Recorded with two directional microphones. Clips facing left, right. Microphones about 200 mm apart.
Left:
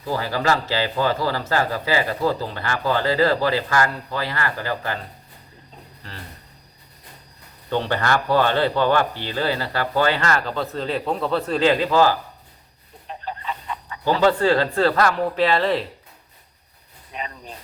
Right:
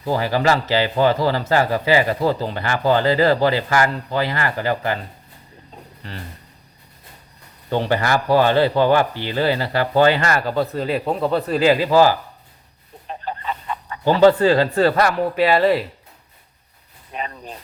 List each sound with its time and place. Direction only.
0.1 s a man's voice: 20° right (ahead or behind)
7.7 s speech: 10° right (ahead or behind)
13.1 s fowl: 50° right (ahead or behind)
14.3 s speech: 15° right (ahead or behind)
17.1 s speech: 45° right (ahead or behind)